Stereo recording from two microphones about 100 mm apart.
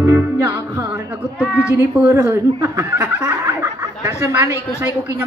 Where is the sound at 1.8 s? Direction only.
30° right (ahead or behind).